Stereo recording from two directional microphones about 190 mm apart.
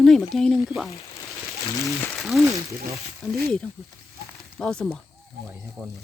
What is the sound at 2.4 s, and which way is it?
Speech, 15° right (ahead or behind).